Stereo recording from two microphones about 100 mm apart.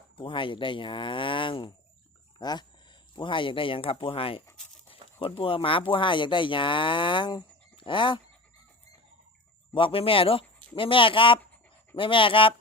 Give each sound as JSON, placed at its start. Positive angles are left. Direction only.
{"t": 0.2, "sound": "speech", "side_deg": 60}
{"t": 2.4, "sound": "speech", "side_deg": 45}
{"t": 3.2, "sound": "speech", "side_deg": 55}
{"t": 9.7, "sound": "speech", "side_deg": 65}